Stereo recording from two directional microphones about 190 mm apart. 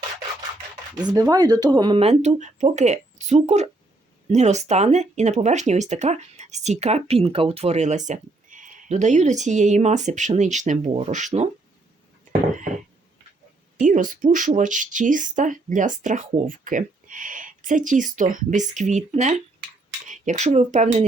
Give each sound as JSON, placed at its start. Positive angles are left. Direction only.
{"t": 0.9, "sound": "speech", "side_deg": -20}
{"t": 13.7, "sound": "speech", "side_deg": -40}